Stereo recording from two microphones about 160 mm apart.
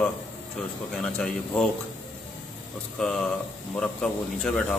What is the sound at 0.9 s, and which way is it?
Speech, 5° left (ahead or behind).